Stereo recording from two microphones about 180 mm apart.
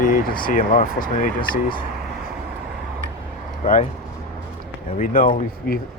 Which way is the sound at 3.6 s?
45° left (ahead or behind).